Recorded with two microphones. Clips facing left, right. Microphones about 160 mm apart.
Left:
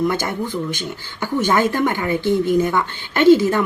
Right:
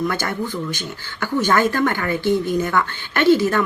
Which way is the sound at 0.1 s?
20° left (ahead or behind).